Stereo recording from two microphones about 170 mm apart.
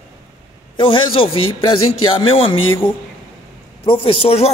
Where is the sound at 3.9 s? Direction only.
35° left (ahead or behind).